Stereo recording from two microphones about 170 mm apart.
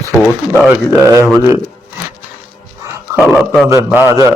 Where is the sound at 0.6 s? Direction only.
10° right (ahead or behind).